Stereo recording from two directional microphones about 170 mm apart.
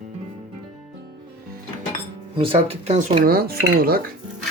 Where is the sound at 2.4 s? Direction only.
30° right (ahead or behind).